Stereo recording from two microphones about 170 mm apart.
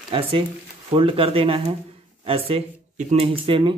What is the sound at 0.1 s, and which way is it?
Speech, 30° right (ahead or behind).